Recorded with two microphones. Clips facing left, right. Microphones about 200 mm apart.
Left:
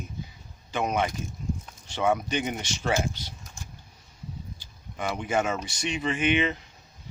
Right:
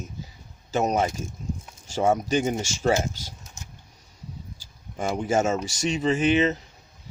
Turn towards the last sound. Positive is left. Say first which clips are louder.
# right 4 dB
turn(degrees=-40)  # may be behind; listen again after turning